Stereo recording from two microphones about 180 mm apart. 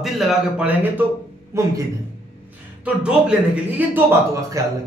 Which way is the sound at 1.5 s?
15° right (ahead or behind).